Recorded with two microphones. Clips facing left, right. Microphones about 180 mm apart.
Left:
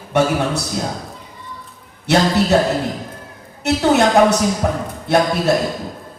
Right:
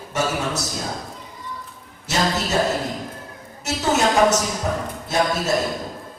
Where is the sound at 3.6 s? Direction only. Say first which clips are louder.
Left 6 dB; 60° left (ahead or behind).